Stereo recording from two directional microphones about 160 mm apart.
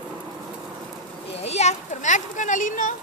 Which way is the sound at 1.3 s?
40° left (ahead or behind).